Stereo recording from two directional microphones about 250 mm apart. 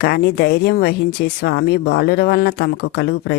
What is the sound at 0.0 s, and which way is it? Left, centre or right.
Speech, left.